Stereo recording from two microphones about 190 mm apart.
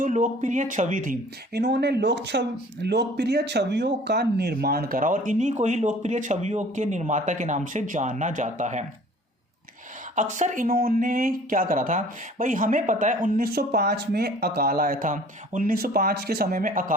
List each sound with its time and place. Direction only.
0.0 s speech: 40° right (ahead or behind)
1.5 s speech: 65° right (ahead or behind); by 8.8 s 40° right (ahead or behind)
10.2 s speech: 40° right (ahead or behind)